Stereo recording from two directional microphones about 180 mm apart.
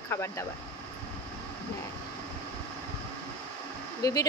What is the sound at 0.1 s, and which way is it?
Speech, 15° left (ahead or behind).